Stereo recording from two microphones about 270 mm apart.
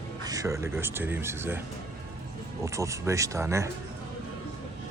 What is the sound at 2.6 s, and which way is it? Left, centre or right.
Speech, centre.